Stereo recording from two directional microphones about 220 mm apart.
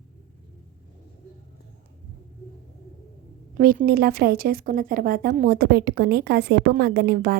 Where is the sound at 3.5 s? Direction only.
40° right (ahead or behind).